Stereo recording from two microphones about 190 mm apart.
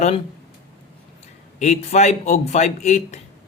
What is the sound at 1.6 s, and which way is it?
Speech, 35° left (ahead or behind).